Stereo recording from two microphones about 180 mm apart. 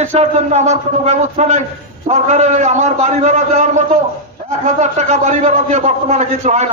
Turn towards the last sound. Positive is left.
turn(degrees=-40)  # may be behind; listen again after turning